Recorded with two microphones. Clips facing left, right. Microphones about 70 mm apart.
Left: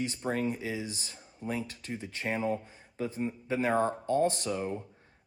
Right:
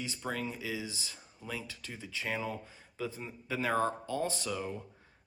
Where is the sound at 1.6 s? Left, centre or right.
Left.